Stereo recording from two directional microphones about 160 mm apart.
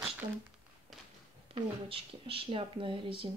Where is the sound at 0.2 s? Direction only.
50° right (ahead or behind).